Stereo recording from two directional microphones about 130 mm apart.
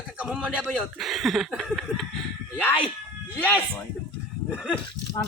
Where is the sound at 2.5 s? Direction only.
10° left (ahead or behind).